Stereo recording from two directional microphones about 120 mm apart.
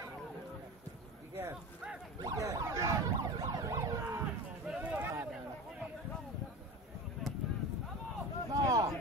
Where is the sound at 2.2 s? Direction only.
30° right (ahead or behind).